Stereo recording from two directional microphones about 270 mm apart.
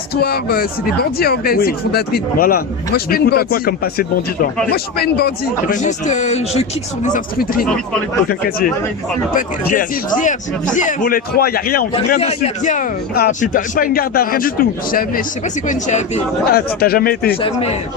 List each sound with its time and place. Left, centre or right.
0.2 s a man's voice: left
10.8 s speech: left
11.9 s a man's voice: left
17.4 s a man's voice: left